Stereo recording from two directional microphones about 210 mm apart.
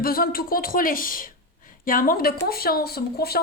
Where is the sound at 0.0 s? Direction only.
45° left (ahead or behind).